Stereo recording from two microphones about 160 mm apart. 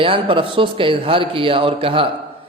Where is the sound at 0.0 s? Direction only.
35° right (ahead or behind).